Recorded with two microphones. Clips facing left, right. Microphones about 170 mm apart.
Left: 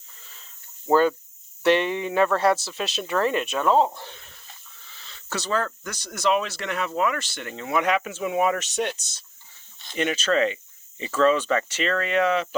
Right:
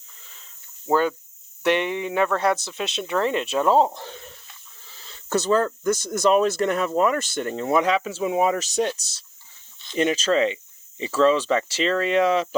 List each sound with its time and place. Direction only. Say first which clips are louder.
0.9 s speech: left 2 dB; 15° right (ahead or behind); by 4.2 s 40° right (ahead or behind)
4.9 s a sound: right 8 dB; 40° right (ahead or behind)
5.8 s speech: right 6 dB; 45° right (ahead or behind)